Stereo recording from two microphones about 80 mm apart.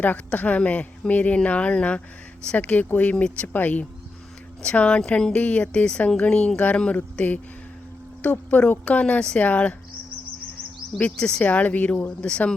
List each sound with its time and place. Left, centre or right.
0.0 s speech: left
10.9 s speech: centre